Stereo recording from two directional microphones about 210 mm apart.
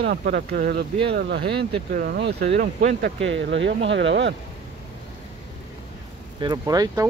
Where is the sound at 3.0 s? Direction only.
60° right (ahead or behind).